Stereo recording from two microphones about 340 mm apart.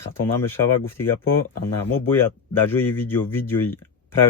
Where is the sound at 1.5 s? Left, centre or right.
Left.